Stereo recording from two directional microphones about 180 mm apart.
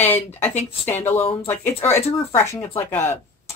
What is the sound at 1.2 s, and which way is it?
Speech, 30° left (ahead or behind).